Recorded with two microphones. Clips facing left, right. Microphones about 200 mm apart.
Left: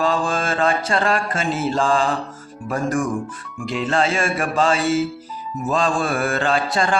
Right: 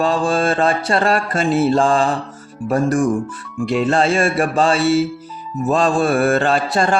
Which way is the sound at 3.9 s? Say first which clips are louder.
Right 2 dB; 35° right (ahead or behind).